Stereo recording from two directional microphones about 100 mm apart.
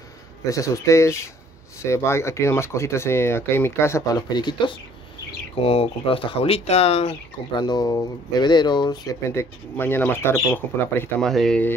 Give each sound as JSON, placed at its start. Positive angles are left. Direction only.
{"t": 0.5, "sound": "speech", "side_deg": 35}
{"t": 5.6, "sound": "speech", "side_deg": 75}
{"t": 7.5, "sound": "speech", "side_deg": 45}
{"t": 9.3, "sound": "speech", "side_deg": 25}
{"t": 11.1, "sound": "speech", "side_deg": 5}